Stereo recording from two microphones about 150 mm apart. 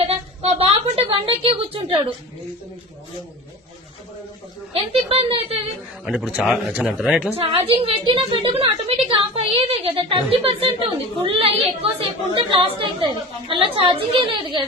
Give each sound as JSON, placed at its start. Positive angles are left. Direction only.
{"t": 0.6, "sound": "a sound", "side_deg": -40}
{"t": 4.7, "sound": "a woman's voice", "side_deg": -35}
{"t": 6.1, "sound": "speech", "side_deg": -5}
{"t": 7.3, "sound": "a woman's voice", "side_deg": -40}